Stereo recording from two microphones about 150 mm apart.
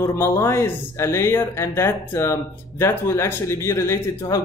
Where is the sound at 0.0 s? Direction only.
20° left (ahead or behind).